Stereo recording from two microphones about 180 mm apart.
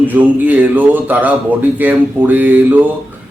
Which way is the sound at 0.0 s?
10° right (ahead or behind).